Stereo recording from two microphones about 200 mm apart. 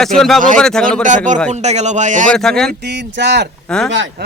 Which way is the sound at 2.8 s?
60° right (ahead or behind).